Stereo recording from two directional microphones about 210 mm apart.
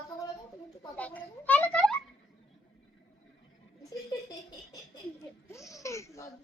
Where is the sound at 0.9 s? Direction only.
5° left (ahead or behind).